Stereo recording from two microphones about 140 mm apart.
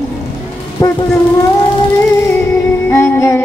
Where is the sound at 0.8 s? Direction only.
20° left (ahead or behind).